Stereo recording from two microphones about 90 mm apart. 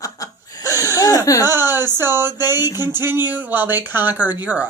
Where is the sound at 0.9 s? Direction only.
40° left (ahead or behind).